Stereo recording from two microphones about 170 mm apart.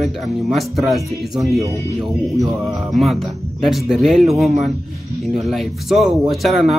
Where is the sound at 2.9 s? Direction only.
Centre (ahead or behind).